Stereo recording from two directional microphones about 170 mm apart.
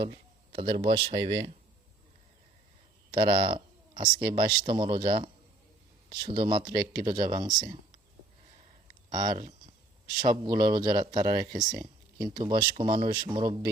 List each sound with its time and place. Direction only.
0.0 s speech: 30° right (ahead or behind)
3.1 s speech: 30° right (ahead or behind)
9.0 s speech: 25° right (ahead or behind)